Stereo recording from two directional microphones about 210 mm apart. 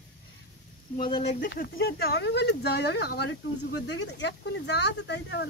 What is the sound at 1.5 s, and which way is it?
Speech, 45° left (ahead or behind).